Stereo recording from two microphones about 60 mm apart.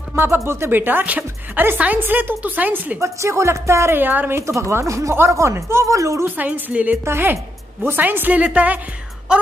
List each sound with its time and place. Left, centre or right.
0.1 s a sound: right
0.5 s a woman's voice: right
3.0 s speech: right
4.0 s a woman's voice: right
4.4 s speech: right
6.2 s a woman's voice: right
7.1 s a woman's voice: right
8.4 s a woman's voice: centre